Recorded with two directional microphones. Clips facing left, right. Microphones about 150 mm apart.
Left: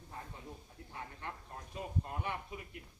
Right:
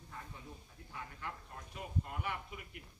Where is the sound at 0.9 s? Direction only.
30° left (ahead or behind).